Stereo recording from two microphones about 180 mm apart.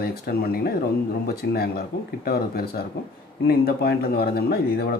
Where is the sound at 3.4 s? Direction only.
60° left (ahead or behind).